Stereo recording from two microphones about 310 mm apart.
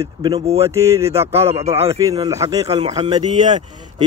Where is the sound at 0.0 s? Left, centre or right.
Centre.